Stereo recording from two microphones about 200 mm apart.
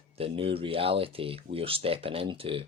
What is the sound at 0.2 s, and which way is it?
Speech, 30° right (ahead or behind).